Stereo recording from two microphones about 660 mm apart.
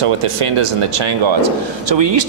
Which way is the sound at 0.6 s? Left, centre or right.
Right.